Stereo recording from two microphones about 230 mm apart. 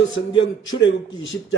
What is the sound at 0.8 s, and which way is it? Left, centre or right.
Speech, left.